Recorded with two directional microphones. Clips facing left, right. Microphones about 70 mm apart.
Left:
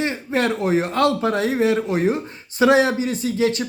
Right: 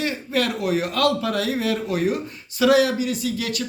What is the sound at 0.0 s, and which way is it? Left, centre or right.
Speech, left.